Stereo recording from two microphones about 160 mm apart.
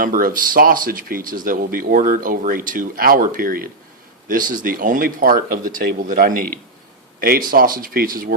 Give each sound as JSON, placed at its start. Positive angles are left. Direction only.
{"t": 0.0, "sound": "speech", "side_deg": -60}